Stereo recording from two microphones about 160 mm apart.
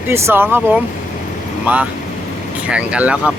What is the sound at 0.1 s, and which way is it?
Speech, 15° right (ahead or behind).